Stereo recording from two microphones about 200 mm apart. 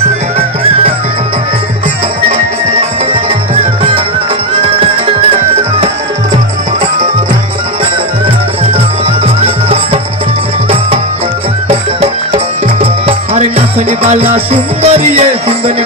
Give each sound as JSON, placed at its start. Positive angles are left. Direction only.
{"t": 4.6, "sound": "music", "side_deg": -25}
{"t": 13.0, "sound": "music", "side_deg": -30}